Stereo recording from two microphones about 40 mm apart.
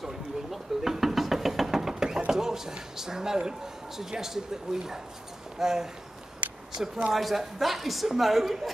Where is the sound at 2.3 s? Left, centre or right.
Centre.